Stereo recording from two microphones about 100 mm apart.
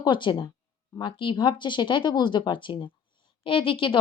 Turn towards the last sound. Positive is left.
turn(degrees=55)  # may be behind; listen again after turning